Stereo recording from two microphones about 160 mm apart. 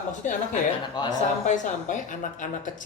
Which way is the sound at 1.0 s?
25° left (ahead or behind).